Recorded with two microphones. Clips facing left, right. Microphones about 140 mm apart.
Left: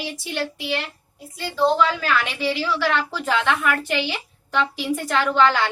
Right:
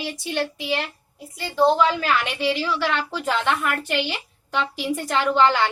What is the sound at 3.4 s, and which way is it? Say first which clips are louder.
Speech: left 1 dB; 5° right (ahead or behind).